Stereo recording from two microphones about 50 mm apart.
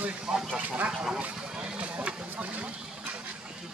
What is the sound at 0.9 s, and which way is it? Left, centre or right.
Speech, centre.